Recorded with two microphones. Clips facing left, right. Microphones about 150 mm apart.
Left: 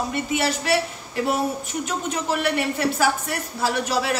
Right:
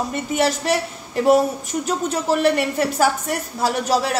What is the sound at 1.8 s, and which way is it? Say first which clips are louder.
Speech: right 5 dB; 40° right (ahead or behind).